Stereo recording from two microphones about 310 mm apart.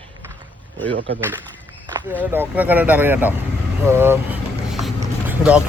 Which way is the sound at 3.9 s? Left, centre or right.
Centre.